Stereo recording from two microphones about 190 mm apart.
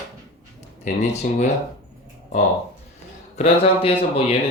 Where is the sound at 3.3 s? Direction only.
30° left (ahead or behind).